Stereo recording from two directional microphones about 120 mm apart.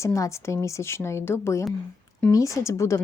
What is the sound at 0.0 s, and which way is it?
A woman's voice, 25° left (ahead or behind).